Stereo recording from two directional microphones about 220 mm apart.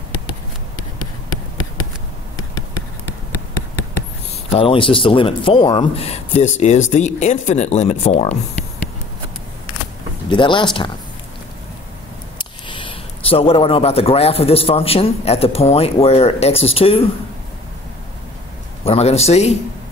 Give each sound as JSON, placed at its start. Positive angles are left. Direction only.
{"t": 4.6, "sound": "speech", "side_deg": 25}
{"t": 10.3, "sound": "speech", "side_deg": 20}
{"t": 12.4, "sound": "speech", "side_deg": 20}
{"t": 18.9, "sound": "speech", "side_deg": 30}